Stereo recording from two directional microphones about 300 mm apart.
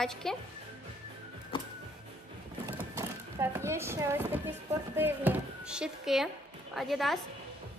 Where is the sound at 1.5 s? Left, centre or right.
Centre.